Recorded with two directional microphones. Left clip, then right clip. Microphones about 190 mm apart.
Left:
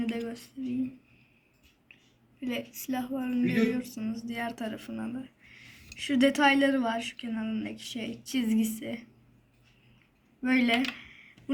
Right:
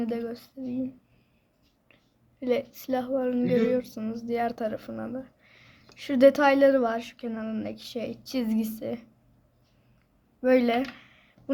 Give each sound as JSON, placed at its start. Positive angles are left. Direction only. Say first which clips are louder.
{"t": 0.1, "sound": "speech", "louder": "right 4 dB", "side_deg": -65}
{"t": 2.5, "sound": "speech", "louder": "right 8 dB", "side_deg": -55}
{"t": 10.4, "sound": "speech", "louder": "right 4 dB", "side_deg": -65}